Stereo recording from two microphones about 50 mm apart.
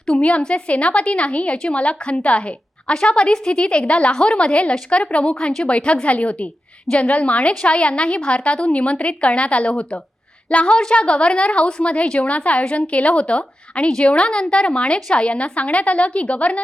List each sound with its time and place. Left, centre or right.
0.0 s a woman's voice: left
5.4 s a woman's voice: centre